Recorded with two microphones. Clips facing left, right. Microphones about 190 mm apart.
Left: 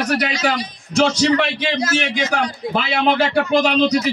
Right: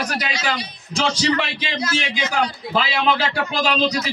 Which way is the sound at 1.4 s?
60° left (ahead or behind).